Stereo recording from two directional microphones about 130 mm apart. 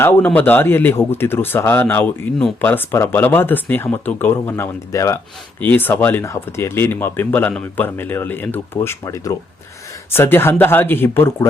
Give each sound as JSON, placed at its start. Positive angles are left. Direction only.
{"t": 0.0, "sound": "speech", "side_deg": 15}